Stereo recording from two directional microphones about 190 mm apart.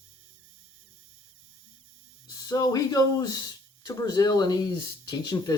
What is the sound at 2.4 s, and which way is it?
Speech, 20° left (ahead or behind).